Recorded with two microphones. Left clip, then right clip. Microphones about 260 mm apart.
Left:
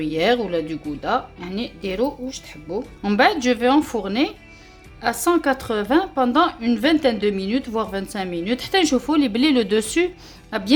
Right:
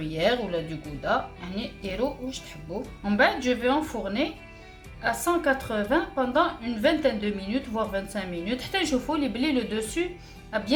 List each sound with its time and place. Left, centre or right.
0.0 s a woman's voice: left